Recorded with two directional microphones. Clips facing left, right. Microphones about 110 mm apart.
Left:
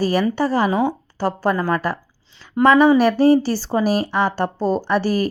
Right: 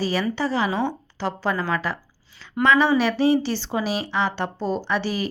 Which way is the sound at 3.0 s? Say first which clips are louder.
Left 5 dB; 45° left (ahead or behind).